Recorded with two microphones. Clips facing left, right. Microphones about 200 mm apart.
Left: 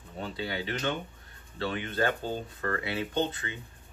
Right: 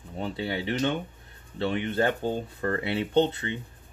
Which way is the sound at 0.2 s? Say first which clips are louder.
Right 4 dB; 20° right (ahead or behind).